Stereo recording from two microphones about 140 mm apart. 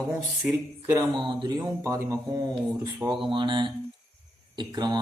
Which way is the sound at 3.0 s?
35° right (ahead or behind).